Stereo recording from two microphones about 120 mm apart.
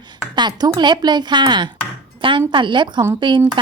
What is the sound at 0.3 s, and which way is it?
A woman's voice, 35° right (ahead or behind).